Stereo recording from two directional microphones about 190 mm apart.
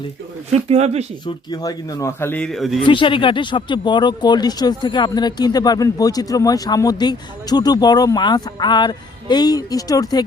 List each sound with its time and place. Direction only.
0.5 s speech: 35° right (ahead or behind)
1.2 s a man's voice: 20° left (ahead or behind); by 2.7 s centre (ahead or behind)
2.8 s speech: 25° left (ahead or behind)